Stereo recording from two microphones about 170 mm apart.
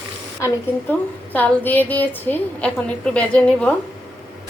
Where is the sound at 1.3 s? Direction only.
10° left (ahead or behind).